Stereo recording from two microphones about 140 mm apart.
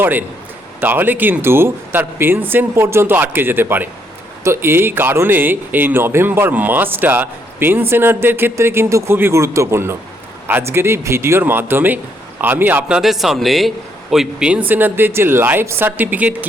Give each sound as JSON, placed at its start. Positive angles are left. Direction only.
{"t": 0.0, "sound": "a man's voice", "side_deg": -15}